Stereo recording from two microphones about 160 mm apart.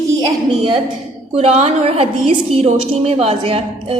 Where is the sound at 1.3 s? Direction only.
40° right (ahead or behind).